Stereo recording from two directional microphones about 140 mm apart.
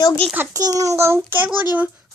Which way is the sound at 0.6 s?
25° right (ahead or behind).